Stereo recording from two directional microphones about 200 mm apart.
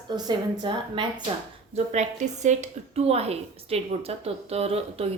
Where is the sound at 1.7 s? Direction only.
35° right (ahead or behind).